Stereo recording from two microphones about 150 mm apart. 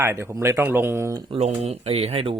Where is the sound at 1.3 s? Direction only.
45° right (ahead or behind).